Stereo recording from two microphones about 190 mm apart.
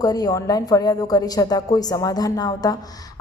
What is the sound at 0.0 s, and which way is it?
A woman's voice, 20° left (ahead or behind).